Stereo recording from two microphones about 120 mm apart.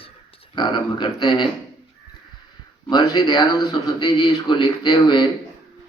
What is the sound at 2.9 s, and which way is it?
Speech, 35° left (ahead or behind).